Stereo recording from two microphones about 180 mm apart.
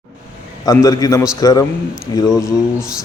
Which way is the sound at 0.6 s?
20° left (ahead or behind).